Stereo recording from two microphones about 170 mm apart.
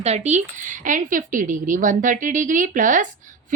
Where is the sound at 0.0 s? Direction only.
40° right (ahead or behind).